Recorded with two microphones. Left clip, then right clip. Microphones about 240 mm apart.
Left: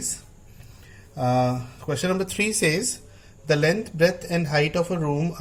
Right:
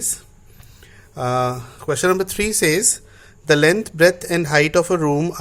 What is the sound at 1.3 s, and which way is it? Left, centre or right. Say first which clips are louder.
A man's voice: right 3 dB; right.